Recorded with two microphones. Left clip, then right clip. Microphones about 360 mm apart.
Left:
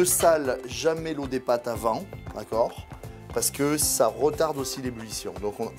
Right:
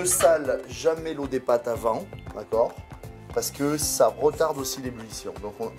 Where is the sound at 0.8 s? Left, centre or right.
Left.